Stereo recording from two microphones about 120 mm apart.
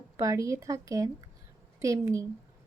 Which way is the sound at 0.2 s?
25° right (ahead or behind).